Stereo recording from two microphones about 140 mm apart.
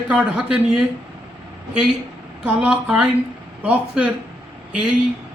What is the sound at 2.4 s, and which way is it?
A man's voice, 5° right (ahead or behind).